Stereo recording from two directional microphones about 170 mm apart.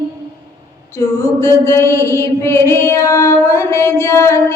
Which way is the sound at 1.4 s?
15° left (ahead or behind).